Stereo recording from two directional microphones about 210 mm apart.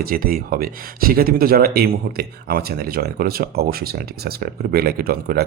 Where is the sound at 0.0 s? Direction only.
45° right (ahead or behind).